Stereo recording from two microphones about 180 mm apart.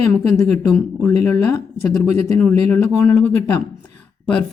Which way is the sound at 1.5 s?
15° left (ahead or behind).